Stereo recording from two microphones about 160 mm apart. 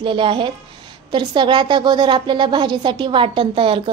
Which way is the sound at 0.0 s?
30° right (ahead or behind).